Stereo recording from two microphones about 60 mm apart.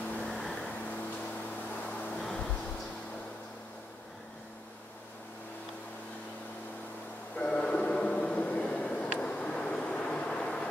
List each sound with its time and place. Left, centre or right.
0.2 s vehicle: centre
1.9 s vehicle: centre
7.3 s a sound: centre